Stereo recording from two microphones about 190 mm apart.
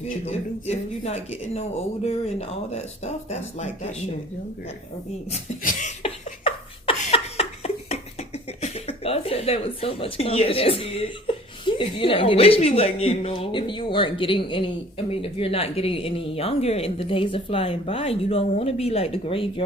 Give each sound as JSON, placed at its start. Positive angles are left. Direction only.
{"t": 0.3, "sound": "speech", "side_deg": 35}
{"t": 5.3, "sound": "laughter", "side_deg": 35}
{"t": 8.6, "sound": "a woman's voice", "side_deg": 30}